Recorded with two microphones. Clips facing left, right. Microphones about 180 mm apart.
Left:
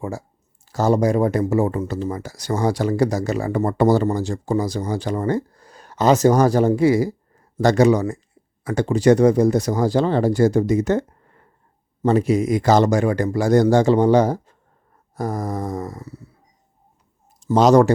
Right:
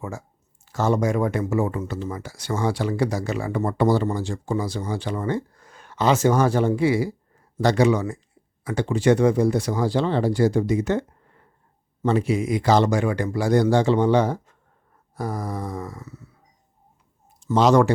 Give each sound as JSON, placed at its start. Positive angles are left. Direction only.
{"t": 0.0, "sound": "speech", "side_deg": 35}
{"t": 12.0, "sound": "speech", "side_deg": 40}
{"t": 17.4, "sound": "speech", "side_deg": 40}